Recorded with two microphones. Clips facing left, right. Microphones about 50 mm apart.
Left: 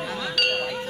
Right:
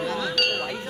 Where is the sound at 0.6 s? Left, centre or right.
Centre.